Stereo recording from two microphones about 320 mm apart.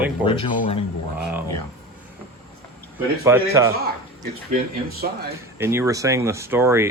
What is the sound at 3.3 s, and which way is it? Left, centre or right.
Speech, centre.